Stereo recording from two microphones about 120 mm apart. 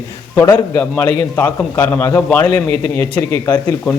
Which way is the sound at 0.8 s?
15° left (ahead or behind).